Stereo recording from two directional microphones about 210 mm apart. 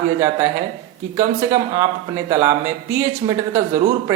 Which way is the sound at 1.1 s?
15° right (ahead or behind).